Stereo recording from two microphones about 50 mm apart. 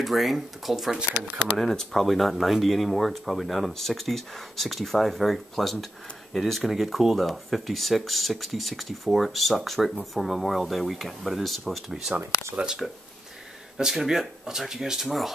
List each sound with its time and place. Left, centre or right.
0.0 s speech: centre
1.6 s speech: centre
12.5 s speech: centre